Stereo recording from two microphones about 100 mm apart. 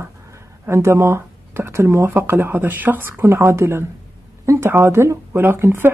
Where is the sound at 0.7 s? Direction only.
25° right (ahead or behind).